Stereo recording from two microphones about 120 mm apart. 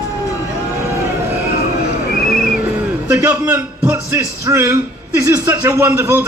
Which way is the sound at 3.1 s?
10° right (ahead or behind).